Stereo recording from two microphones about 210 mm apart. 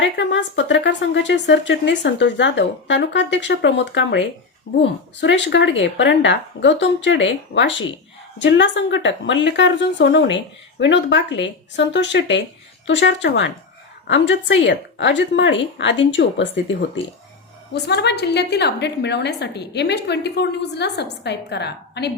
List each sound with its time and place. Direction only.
0.2 s a woman's voice: 60° left (ahead or behind)
17.7 s a woman's voice: 55° left (ahead or behind)